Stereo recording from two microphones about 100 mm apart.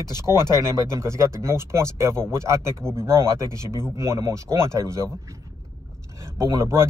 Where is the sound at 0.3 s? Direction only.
30° right (ahead or behind).